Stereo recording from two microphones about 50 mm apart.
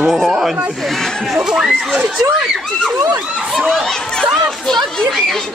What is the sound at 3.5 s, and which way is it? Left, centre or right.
Speech, centre.